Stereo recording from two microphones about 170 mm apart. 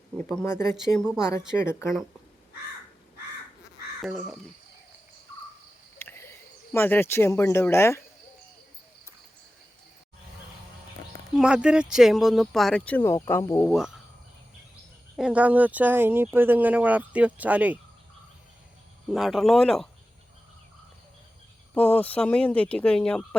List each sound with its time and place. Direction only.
0.2 s speech: 10° left (ahead or behind)
0.8 s speech: 5° right (ahead or behind)
1.5 s speech: 15° left (ahead or behind)
6.0 s a sound: 15° left (ahead or behind)
6.7 s speech: 10° left (ahead or behind)
11.3 s speech: 5° right (ahead or behind); by 13.7 s 15° left (ahead or behind)
13.7 s speech: 5° right (ahead or behind)
15.1 s speech: 5° right (ahead or behind)
19.1 s speech: centre (ahead or behind)
21.8 s speech: 5° left (ahead or behind)